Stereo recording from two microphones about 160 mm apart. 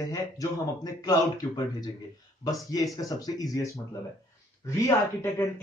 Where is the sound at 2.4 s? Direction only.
20° left (ahead or behind).